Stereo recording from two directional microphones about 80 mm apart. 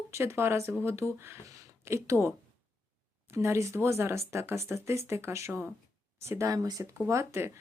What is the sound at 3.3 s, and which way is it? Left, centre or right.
Speech, right.